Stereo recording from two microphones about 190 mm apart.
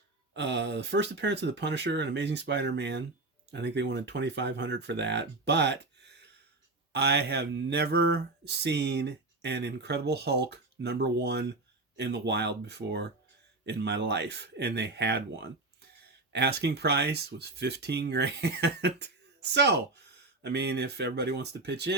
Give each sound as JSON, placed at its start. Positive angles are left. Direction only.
{"t": 0.3, "sound": "speech", "side_deg": -65}